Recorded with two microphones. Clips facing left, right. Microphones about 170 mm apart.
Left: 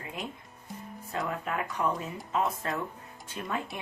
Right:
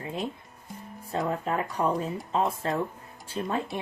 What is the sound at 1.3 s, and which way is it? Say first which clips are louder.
Speech: right 4 dB; 35° right (ahead or behind).